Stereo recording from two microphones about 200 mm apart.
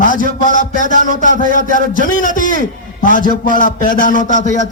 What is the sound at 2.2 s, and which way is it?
A man's voice, 40° left (ahead or behind).